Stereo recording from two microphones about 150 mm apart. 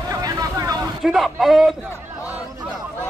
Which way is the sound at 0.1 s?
25° right (ahead or behind).